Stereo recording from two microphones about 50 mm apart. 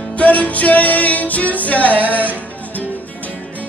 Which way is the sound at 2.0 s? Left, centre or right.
Right.